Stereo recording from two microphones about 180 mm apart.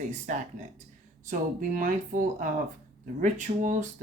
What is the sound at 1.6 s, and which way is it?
Speech, 45° right (ahead or behind).